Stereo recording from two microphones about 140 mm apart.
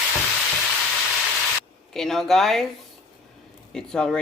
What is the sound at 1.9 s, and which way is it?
Speech, 5° left (ahead or behind).